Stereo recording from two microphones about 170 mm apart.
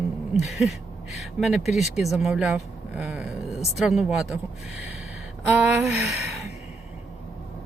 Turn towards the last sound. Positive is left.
turn(degrees=-5)  # may be behind; listen again after turning